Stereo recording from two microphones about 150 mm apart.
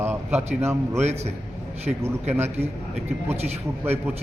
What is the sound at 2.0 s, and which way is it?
Speech, 15° right (ahead or behind).